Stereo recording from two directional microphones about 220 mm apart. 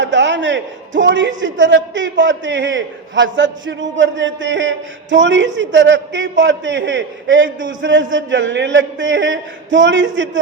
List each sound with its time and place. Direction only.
0.0 s a man's voice: 55° right (ahead or behind)